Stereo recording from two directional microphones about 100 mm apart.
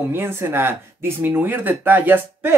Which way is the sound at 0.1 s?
25° right (ahead or behind).